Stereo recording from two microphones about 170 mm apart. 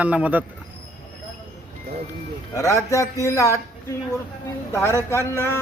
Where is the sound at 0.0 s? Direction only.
10° right (ahead or behind).